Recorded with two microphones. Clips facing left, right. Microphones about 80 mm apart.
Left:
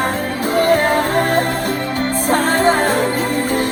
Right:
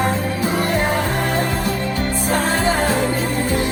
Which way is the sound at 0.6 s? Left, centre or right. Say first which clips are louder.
Left 5 dB; left.